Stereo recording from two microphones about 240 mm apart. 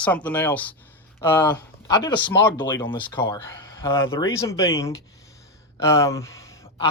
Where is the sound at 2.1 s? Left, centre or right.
Left.